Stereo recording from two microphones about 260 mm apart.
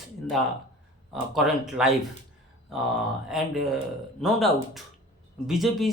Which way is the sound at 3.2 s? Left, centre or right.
Centre.